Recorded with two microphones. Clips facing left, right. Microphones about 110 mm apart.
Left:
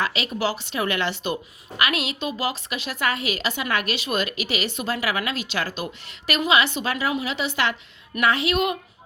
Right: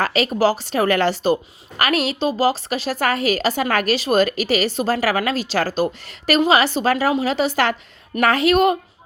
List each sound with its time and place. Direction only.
0.0 s a woman's voice: 40° right (ahead or behind)